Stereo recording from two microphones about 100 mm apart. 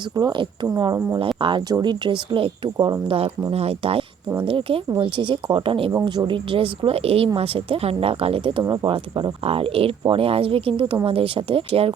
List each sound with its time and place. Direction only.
0.2 s speech: 50° right (ahead or behind)
3.1 s a woman's voice: 70° right (ahead or behind)
3.5 s speech: 85° right
4.4 s speech: 65° right (ahead or behind)
6.1 s a woman's voice: 50° right (ahead or behind); by 8.6 s 70° right (ahead or behind)
8.6 s a woman's voice: 45° right (ahead or behind); by 11.9 s 65° right (ahead or behind)